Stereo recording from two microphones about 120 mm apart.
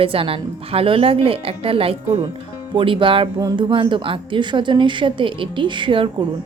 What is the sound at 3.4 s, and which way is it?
A woman's voice, 35° right (ahead or behind).